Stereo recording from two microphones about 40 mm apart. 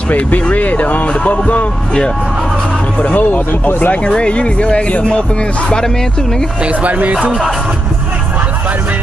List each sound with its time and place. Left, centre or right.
0.1 s speech: left
3.0 s speech: left
3.9 s speech: left
6.7 s speech: right